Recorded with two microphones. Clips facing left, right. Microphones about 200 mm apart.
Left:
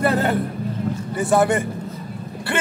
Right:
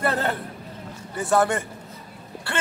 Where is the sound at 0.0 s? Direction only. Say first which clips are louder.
Left 6 dB; 5° left (ahead or behind).